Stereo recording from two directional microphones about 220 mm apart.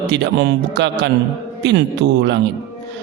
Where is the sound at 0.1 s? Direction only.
50° right (ahead or behind).